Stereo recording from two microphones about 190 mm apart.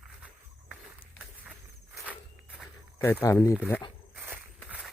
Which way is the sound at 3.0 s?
10° left (ahead or behind).